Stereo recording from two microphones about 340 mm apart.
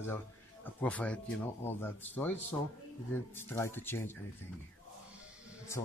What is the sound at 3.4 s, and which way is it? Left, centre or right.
Speech, centre.